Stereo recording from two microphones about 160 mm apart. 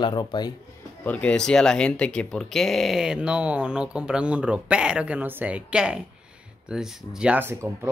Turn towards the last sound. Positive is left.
turn(degrees=-15)  # may be behind; listen again after turning